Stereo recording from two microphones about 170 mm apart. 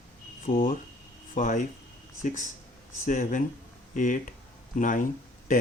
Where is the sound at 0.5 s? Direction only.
55° left (ahead or behind).